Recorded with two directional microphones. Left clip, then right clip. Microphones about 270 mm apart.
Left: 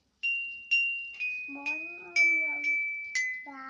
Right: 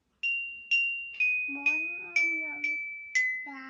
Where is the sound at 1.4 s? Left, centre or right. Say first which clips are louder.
Right 6 dB; centre.